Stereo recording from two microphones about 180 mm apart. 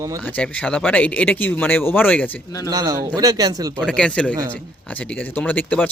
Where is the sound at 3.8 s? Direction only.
5° left (ahead or behind).